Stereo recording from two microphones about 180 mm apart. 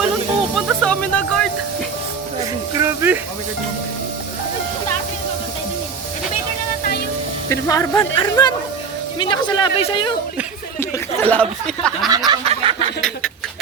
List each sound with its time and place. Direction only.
0.5 s music: 5° left (ahead or behind)
2.7 s speech: 15° right (ahead or behind)
7.5 s speech: 20° left (ahead or behind)
11.3 s speech: 5° left (ahead or behind)
12.0 s a sound: 20° right (ahead or behind)
12.5 s chicken: 35° right (ahead or behind)
13.0 s speech: 5° left (ahead or behind)